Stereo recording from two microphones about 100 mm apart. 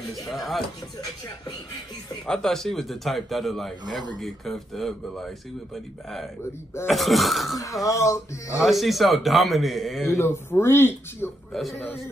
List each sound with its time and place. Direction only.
0.3 s a man's voice: centre (ahead or behind)
2.2 s a man's voice: 5° left (ahead or behind)
6.9 s a man's voice: centre (ahead or behind)
7.5 s speech: 35° left (ahead or behind)
8.5 s a man's voice: centre (ahead or behind)
10.1 s speech: 25° left (ahead or behind)